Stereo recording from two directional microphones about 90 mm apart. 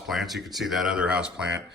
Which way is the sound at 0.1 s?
Centre (ahead or behind).